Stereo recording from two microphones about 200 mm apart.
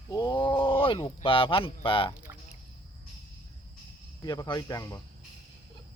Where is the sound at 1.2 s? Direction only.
25° left (ahead or behind).